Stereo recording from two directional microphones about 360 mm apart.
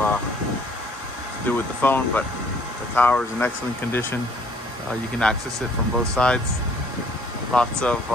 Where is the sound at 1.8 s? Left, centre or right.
Centre.